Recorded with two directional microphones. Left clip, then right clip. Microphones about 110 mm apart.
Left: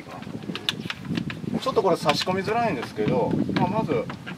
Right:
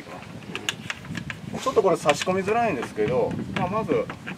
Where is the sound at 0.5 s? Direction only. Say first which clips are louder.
Left 1 dB; centre (ahead or behind).